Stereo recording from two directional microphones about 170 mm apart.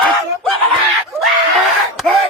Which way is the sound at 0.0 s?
5° left (ahead or behind).